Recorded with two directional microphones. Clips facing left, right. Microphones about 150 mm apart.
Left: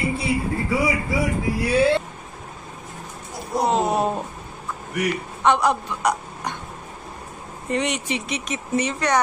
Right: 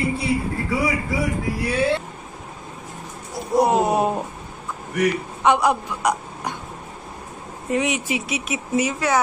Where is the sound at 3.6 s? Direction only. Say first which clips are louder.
Left 2 dB; 15° right (ahead or behind).